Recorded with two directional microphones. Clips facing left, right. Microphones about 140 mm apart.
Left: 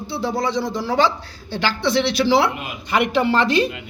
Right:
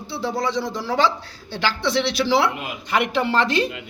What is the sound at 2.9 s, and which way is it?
Speech, 5° left (ahead or behind).